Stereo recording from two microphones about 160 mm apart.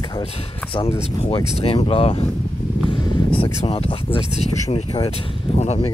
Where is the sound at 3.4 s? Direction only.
35° left (ahead or behind).